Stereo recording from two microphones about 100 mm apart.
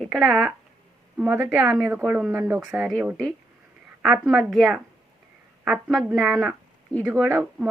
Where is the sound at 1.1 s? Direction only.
20° right (ahead or behind).